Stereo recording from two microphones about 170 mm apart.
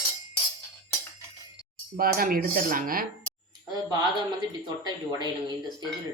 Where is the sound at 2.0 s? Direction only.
60° right (ahead or behind).